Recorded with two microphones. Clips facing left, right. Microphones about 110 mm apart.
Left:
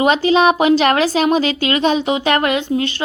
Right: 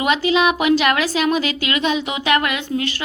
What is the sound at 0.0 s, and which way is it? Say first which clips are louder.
A woman's voice: left 4 dB; 35° left (ahead or behind).